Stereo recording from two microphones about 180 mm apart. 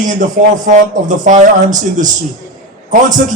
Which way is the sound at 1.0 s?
45° right (ahead or behind).